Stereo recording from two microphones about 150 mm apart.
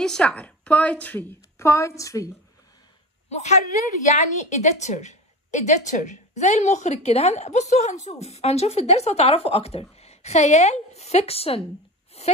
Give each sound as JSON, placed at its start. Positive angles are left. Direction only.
{"t": 0.0, "sound": "a woman's voice", "side_deg": 5}
{"t": 3.3, "sound": "a woman's voice", "side_deg": 50}
{"t": 12.2, "sound": "a sound", "side_deg": 45}